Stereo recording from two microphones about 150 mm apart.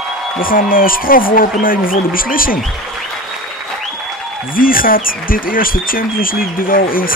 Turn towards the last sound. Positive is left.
turn(degrees=70)  # may be behind; listen again after turning